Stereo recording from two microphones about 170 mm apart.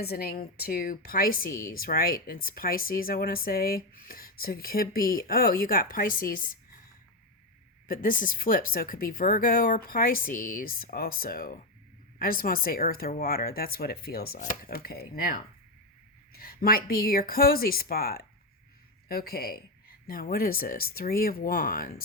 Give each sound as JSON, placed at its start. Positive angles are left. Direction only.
{"t": 0.0, "sound": "speech", "side_deg": 65}
{"t": 7.9, "sound": "speech", "side_deg": 55}